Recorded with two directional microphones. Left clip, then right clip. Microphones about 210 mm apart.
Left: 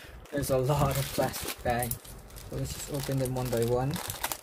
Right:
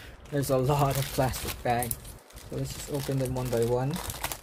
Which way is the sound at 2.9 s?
10° right (ahead or behind).